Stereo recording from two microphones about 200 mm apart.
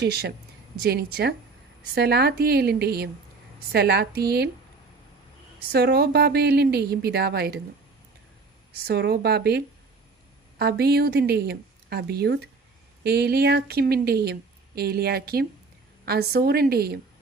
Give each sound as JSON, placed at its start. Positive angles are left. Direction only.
{"t": 0.0, "sound": "a woman's voice", "side_deg": -55}
{"t": 5.7, "sound": "speech", "side_deg": -55}
{"t": 8.9, "sound": "a woman's voice", "side_deg": -55}